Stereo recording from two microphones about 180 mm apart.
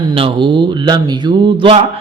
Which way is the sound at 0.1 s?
30° right (ahead or behind).